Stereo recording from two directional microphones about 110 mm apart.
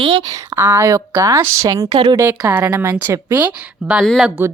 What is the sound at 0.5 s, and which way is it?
A woman's voice, 20° right (ahead or behind).